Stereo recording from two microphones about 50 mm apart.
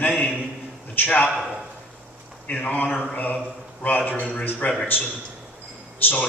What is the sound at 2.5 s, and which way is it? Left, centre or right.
Speech, left.